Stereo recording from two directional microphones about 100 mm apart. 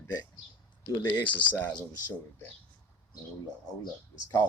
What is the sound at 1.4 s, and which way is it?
Speech, 15° left (ahead or behind).